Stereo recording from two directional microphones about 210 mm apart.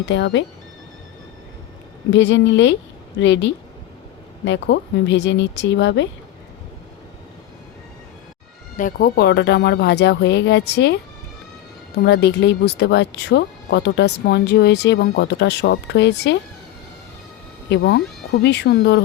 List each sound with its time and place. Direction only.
0.0 s speech: 60° left (ahead or behind)
2.0 s speech: 60° left (ahead or behind)
8.7 s speech: 40° left (ahead or behind)
12.0 s speech: 55° left (ahead or behind)
17.7 s speech: 50° left (ahead or behind)